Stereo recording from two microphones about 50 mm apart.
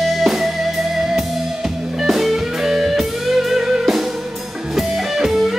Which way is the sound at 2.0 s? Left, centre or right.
Centre.